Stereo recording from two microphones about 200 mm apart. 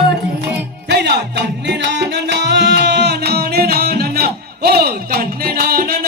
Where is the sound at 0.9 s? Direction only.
60° right (ahead or behind).